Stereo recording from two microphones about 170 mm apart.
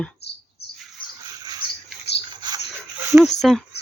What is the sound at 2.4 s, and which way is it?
Dog, 25° right (ahead or behind).